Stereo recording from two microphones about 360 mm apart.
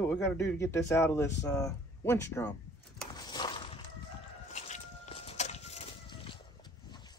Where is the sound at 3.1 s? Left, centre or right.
Centre.